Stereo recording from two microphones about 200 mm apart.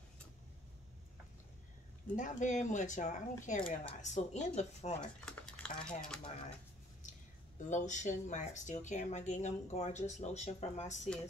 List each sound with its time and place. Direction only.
2.1 s speech: 40° left (ahead or behind)
5.0 s speech: 5° left (ahead or behind)
7.5 s speech: 40° left (ahead or behind)